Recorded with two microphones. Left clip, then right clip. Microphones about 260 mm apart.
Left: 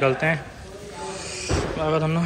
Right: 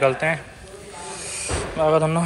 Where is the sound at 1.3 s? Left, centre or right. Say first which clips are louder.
Even; right.